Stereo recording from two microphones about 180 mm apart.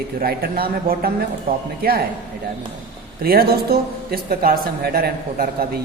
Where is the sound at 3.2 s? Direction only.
60° right (ahead or behind).